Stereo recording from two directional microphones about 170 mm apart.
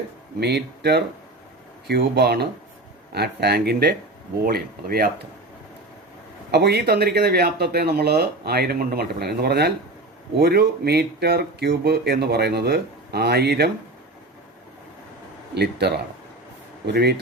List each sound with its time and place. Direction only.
0.3 s speech: 75° right (ahead or behind)
6.5 s speech: 75° right (ahead or behind)
15.5 s speech: 75° right (ahead or behind)